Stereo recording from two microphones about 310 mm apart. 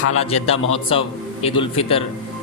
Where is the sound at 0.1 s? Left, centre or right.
Left.